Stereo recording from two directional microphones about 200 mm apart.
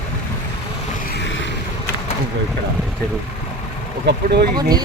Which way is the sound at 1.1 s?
65° left (ahead or behind).